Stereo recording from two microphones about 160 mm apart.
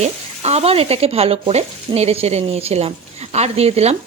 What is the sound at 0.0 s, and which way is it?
Speech, 45° right (ahead or behind).